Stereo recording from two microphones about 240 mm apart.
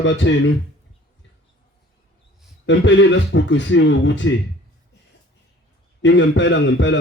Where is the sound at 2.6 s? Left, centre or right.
Left.